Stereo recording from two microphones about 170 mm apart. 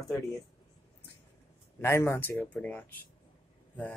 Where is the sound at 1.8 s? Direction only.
15° left (ahead or behind).